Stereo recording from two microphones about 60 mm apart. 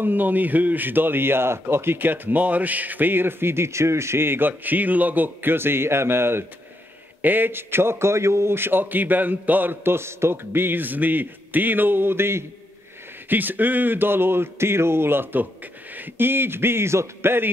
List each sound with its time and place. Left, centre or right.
0.0 s a man's voice: right
13.3 s a man's voice: right